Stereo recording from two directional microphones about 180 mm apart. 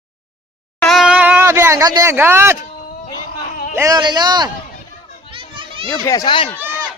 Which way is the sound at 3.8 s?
20° right (ahead or behind).